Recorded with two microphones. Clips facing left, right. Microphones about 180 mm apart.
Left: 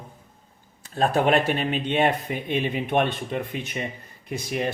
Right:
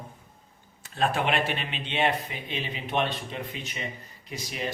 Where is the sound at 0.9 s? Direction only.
40° left (ahead or behind).